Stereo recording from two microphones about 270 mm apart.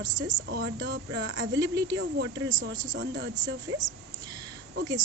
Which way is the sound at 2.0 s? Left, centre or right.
Right.